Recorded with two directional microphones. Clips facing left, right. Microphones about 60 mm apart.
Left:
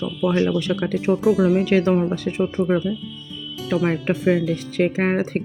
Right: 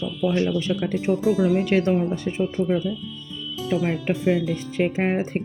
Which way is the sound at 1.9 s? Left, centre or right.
Left.